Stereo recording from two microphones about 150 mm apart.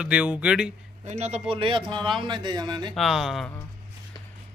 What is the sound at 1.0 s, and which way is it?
Speech, 50° right (ahead or behind).